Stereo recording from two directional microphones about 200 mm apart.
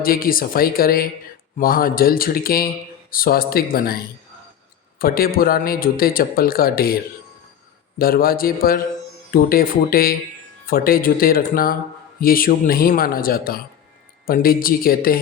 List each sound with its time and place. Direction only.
0.0 s speech: 45° left (ahead or behind)
7.9 s speech: 45° left (ahead or behind)